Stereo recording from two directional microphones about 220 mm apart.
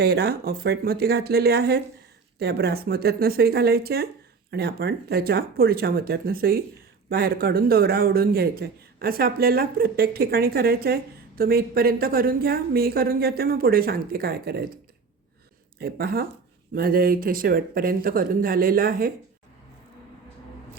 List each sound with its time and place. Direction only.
0.0 s speech: 45° right (ahead or behind)
15.8 s speech: 45° right (ahead or behind)